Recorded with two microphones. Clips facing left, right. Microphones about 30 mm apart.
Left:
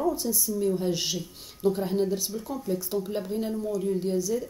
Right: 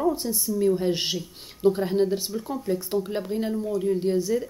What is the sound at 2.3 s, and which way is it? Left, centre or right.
Speech, right.